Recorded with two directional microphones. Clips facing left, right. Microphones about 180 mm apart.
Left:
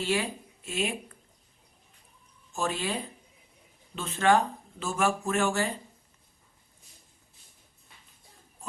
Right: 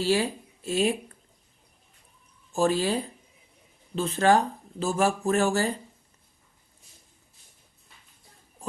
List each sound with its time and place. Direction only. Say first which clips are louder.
0.0 s speech: right 5 dB; 35° right (ahead or behind)
2.5 s speech: right 7 dB; 35° right (ahead or behind)